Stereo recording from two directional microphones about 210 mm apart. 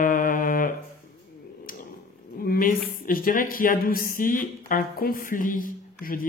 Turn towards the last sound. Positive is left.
turn(degrees=40)  # may be behind; listen again after turning